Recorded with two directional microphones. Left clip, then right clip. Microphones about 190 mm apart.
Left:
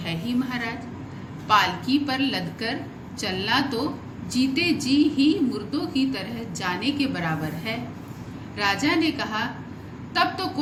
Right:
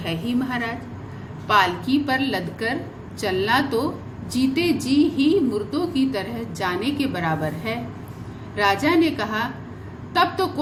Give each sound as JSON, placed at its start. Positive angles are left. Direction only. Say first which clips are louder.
{"t": 0.1, "sound": "a woman's voice", "louder": "right 3 dB", "side_deg": -40}